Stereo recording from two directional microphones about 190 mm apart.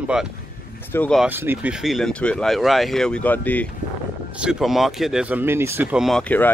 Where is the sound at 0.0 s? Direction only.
5° right (ahead or behind).